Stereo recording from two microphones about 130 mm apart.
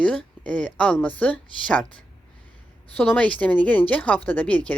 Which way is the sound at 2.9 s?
15° left (ahead or behind).